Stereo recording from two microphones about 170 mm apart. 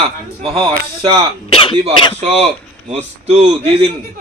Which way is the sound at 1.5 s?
30° left (ahead or behind).